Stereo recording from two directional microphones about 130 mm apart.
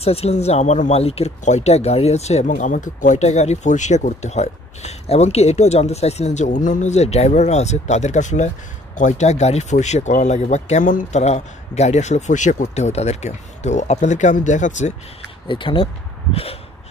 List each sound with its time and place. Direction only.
0.0 s speech: 50° left (ahead or behind); by 15.0 s 65° left (ahead or behind)
15.4 s speech: 40° left (ahead or behind)